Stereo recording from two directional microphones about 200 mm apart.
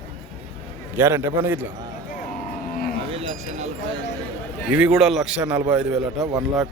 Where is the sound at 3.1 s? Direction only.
30° right (ahead or behind).